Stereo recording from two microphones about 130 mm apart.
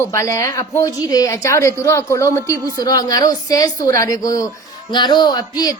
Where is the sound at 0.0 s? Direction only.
20° left (ahead or behind).